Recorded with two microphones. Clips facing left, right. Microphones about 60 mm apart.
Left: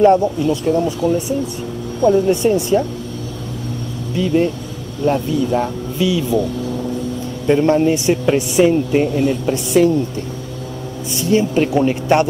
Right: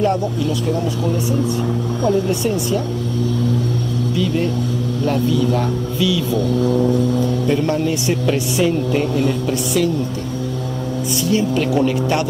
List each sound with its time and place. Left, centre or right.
0.0 s speech: left
2.4 s speech: left
4.1 s speech: left
7.4 s speech: left
9.8 s speech: left
11.1 s speech: left